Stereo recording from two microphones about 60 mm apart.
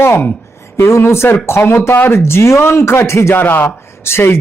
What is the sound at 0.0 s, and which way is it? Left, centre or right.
Speech, left.